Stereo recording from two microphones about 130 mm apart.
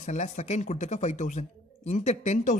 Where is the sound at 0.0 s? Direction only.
60° left (ahead or behind).